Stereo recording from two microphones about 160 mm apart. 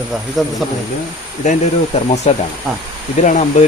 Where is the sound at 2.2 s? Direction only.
45° left (ahead or behind).